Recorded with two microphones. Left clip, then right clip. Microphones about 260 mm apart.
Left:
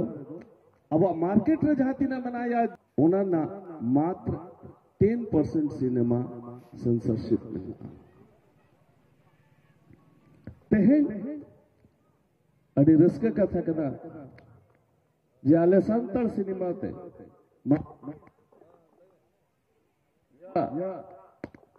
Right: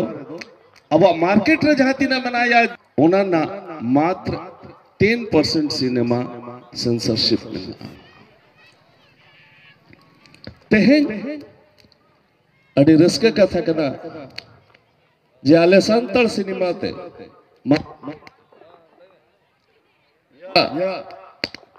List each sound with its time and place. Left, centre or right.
0.8 s a man's voice: right
10.4 s a sound: right
12.7 s a man's voice: right
15.4 s a man's voice: right
20.5 s a man's voice: right